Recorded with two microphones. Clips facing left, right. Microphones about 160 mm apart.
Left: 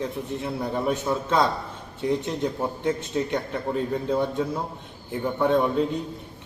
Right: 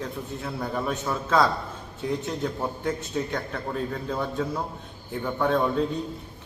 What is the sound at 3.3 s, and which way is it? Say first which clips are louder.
A man's voice: left 4 dB; 20° left (ahead or behind).